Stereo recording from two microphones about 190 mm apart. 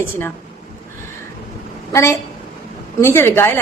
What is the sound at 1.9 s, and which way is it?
A woman's voice, 15° left (ahead or behind).